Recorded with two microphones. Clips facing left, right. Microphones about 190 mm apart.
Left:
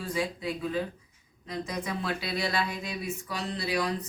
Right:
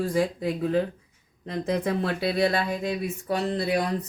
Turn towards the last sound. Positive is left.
turn(degrees=-50)  # may be behind; listen again after turning